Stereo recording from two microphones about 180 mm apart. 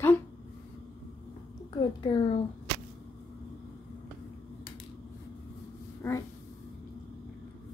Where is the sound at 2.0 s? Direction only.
30° left (ahead or behind).